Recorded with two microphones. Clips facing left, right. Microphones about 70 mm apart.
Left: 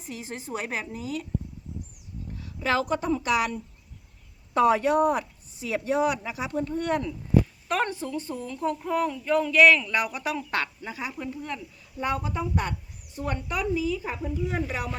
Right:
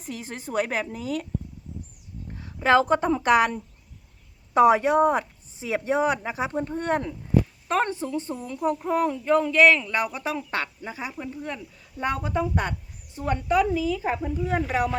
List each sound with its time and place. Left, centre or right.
0.0 s a woman's voice: right
2.4 s speech: right
4.5 s a woman's voice: right
13.1 s a woman's voice: right